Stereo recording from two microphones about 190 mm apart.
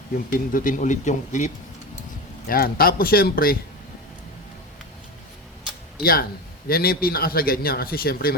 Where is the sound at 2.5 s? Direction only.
50° left (ahead or behind).